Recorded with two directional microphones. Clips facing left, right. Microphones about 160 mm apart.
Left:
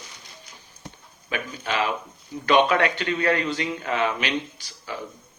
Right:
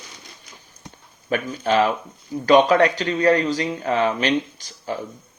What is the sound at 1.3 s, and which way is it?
Speech, 45° right (ahead or behind).